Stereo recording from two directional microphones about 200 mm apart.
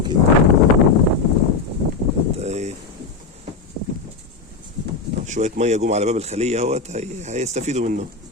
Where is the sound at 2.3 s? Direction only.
35° right (ahead or behind).